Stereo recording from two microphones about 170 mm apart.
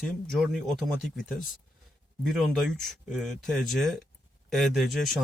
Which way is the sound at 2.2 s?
Centre (ahead or behind).